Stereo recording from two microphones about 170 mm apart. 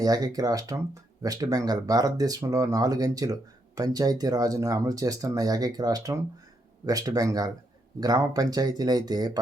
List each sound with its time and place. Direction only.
0.0 s speech: 20° right (ahead or behind)